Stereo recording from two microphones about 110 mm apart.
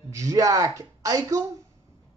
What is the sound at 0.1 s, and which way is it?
A man's voice, 30° right (ahead or behind).